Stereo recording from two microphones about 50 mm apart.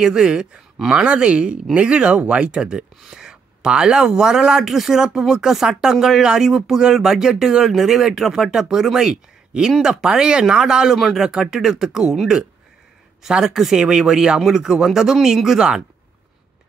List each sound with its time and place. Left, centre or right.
0.0 s speech: centre
1.0 s speech: right